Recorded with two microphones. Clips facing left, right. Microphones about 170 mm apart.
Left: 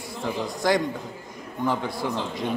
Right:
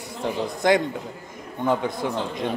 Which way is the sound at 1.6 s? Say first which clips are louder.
Right 3 dB; 20° right (ahead or behind).